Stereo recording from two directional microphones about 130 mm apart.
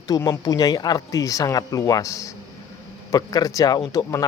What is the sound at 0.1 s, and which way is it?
Speech, 30° left (ahead or behind).